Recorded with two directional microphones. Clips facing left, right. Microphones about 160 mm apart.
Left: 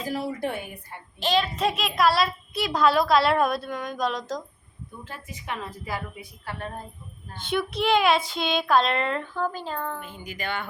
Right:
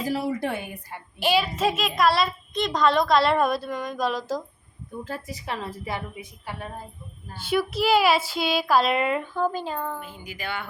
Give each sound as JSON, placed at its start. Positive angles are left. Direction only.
{"t": 0.3, "sound": "a woman's voice", "side_deg": -80}
{"t": 1.2, "sound": "a child's voice", "side_deg": -10}
{"t": 5.0, "sound": "a woman's voice", "side_deg": -35}
{"t": 6.4, "sound": "a child's voice", "side_deg": -15}